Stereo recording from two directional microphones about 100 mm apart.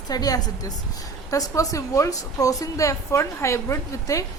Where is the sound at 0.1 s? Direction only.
40° left (ahead or behind).